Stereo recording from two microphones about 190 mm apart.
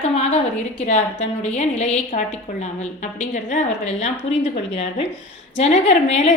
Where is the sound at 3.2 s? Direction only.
45° left (ahead or behind).